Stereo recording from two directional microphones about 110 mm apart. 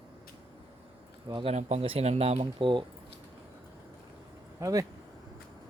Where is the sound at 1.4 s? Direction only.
70° right (ahead or behind).